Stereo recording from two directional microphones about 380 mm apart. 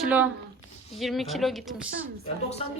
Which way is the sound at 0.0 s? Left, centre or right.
Centre.